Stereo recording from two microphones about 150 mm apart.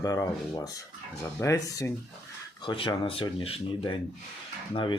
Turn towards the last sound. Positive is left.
turn(degrees=35)  # may be behind; listen again after turning